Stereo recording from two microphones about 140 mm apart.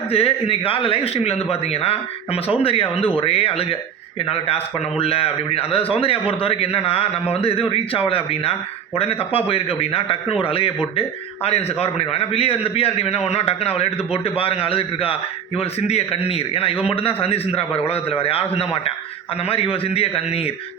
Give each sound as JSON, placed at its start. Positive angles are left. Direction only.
{"t": 0.1, "sound": "a man's voice", "side_deg": 45}